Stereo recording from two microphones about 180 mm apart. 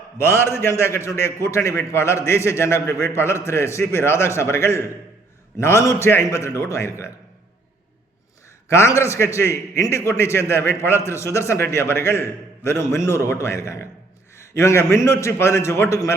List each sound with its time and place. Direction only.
0.2 s a man's voice: 15° left (ahead or behind)
8.7 s a man's voice: 15° left (ahead or behind)